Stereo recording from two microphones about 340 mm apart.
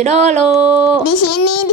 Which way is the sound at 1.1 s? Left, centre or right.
Left.